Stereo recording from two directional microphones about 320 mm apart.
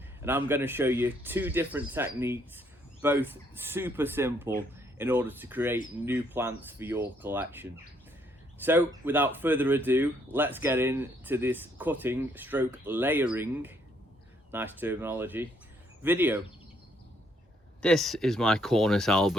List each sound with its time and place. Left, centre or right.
0.2 s speech: centre
17.8 s speech: centre